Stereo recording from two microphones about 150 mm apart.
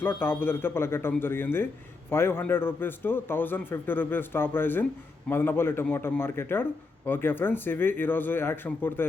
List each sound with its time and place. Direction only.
0.0 s a man's voice: 15° left (ahead or behind)